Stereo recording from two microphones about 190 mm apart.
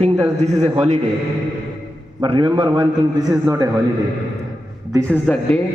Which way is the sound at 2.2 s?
30° right (ahead or behind).